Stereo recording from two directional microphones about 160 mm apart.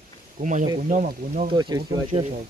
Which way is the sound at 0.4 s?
50° right (ahead or behind).